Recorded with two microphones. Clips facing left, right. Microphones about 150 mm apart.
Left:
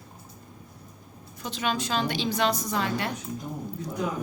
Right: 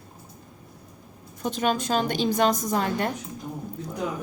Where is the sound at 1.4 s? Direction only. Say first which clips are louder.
Right 4 dB; 45° right (ahead or behind).